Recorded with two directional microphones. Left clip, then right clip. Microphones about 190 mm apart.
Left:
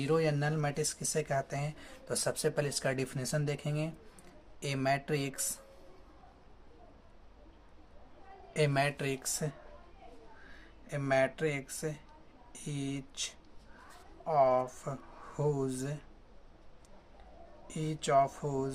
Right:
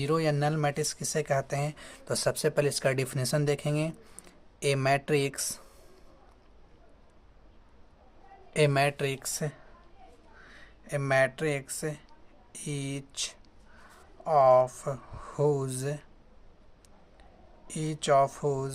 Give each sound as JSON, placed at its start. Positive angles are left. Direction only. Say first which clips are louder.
{"t": 0.0, "sound": "speech", "louder": "right 3 dB", "side_deg": -40}
{"t": 8.5, "sound": "speech", "louder": "right 5 dB", "side_deg": -40}
{"t": 17.7, "sound": "speech", "louder": "right 5 dB", "side_deg": -50}